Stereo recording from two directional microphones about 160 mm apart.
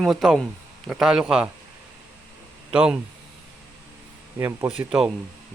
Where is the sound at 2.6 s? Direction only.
5° right (ahead or behind).